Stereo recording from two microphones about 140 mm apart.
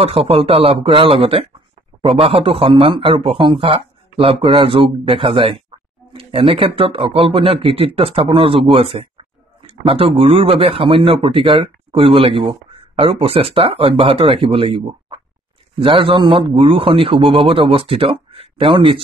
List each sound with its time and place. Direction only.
0.0 s speech: 40° right (ahead or behind)